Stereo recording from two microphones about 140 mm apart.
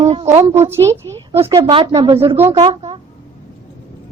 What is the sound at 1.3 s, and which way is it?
A woman's voice, 40° right (ahead or behind).